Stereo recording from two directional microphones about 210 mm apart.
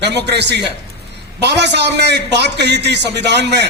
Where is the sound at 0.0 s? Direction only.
55° right (ahead or behind).